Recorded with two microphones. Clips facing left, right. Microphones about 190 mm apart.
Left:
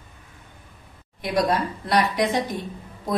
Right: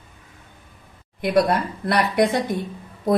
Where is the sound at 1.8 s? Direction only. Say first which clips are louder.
Right 2 dB; 55° right (ahead or behind).